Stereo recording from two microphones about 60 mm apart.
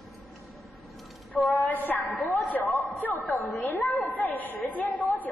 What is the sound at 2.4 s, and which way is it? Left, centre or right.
A man's voice, left.